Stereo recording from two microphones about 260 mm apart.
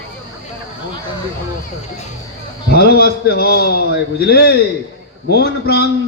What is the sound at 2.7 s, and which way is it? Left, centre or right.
A man's voice, left.